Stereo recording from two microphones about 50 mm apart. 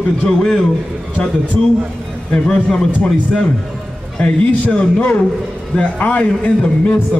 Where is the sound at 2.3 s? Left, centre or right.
Centre.